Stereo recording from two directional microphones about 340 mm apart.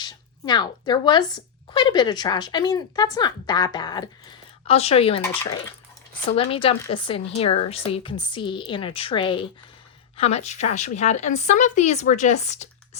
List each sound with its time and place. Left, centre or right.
0.0 s speech: centre
6.3 s a woman's voice: centre